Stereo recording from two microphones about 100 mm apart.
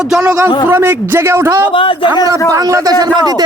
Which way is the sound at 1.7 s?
60° left (ahead or behind).